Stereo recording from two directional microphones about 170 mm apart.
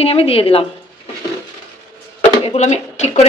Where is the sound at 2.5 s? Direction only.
40° left (ahead or behind).